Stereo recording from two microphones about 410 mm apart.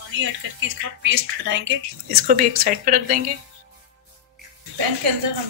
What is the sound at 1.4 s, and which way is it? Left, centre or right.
Speech, right.